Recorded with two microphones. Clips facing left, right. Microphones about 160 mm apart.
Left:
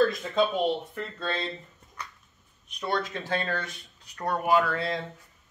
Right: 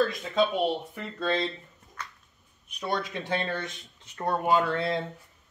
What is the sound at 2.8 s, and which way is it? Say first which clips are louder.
Speech: left 1 dB; 10° right (ahead or behind).